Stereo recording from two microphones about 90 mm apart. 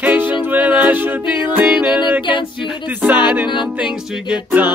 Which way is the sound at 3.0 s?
20° right (ahead or behind).